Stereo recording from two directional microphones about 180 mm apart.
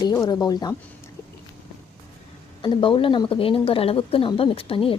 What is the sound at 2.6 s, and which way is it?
Speech, 30° left (ahead or behind).